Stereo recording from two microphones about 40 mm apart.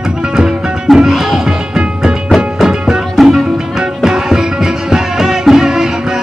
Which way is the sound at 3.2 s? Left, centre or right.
Centre.